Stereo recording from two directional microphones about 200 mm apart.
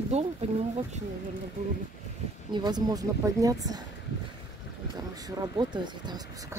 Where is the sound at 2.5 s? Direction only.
20° right (ahead or behind).